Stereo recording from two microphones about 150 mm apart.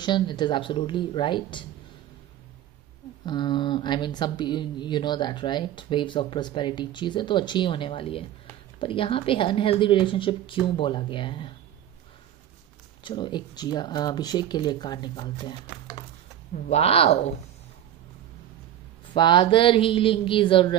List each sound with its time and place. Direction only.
0.0 s speech: 30° left (ahead or behind)
3.3 s speech: 30° left (ahead or behind)
13.0 s speech: 30° left (ahead or behind)
16.6 s speech: 45° left (ahead or behind)
19.1 s speech: 30° left (ahead or behind)